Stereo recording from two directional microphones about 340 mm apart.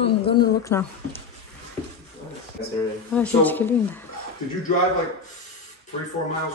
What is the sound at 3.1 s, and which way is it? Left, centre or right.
Speech, centre.